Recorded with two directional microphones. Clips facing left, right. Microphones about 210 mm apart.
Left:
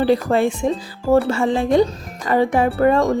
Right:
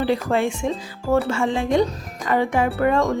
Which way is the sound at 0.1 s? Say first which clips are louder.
Left 4 dB; 35° left (ahead or behind).